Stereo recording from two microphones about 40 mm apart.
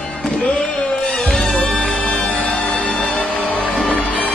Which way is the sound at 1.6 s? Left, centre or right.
Left.